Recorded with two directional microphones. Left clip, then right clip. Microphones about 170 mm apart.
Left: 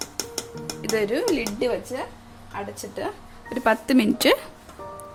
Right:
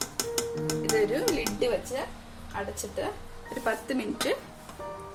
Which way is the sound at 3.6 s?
80° left.